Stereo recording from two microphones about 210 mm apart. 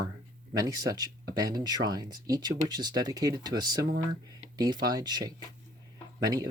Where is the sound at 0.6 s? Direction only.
15° right (ahead or behind).